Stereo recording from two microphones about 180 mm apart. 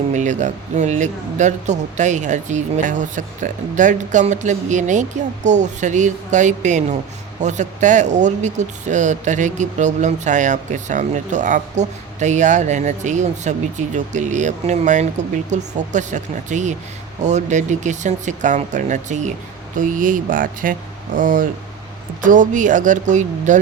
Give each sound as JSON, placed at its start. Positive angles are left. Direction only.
{"t": 0.1, "sound": "speech", "side_deg": -40}